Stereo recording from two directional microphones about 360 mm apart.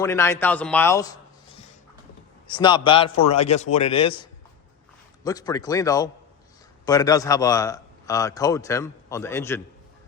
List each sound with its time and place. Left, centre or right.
0.0 s a man's voice: centre